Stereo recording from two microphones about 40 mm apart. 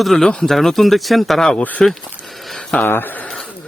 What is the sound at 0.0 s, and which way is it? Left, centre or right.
Speech, centre.